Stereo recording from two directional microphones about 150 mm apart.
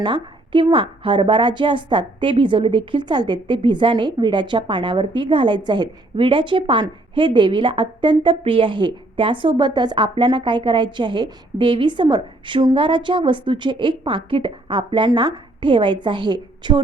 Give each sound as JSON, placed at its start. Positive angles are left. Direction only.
{"t": 0.0, "sound": "a woman's voice", "side_deg": -35}